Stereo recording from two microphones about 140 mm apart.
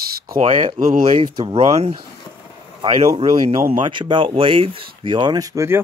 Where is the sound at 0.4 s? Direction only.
40° right (ahead or behind).